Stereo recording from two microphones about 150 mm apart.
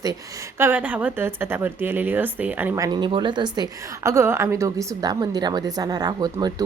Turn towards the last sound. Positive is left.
turn(degrees=-25)  # may be behind; listen again after turning